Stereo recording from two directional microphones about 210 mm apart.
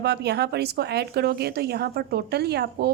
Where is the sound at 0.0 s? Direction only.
50° right (ahead or behind).